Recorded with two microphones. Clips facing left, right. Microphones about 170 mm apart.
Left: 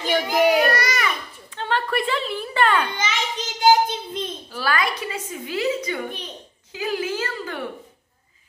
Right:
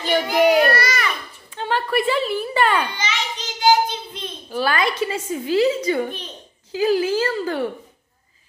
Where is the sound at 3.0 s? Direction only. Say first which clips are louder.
Left 1 dB; 50° left (ahead or behind).